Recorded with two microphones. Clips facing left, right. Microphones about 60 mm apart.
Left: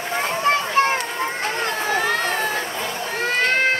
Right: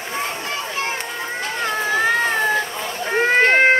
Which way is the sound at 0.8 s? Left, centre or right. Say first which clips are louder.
Left 7 dB; left.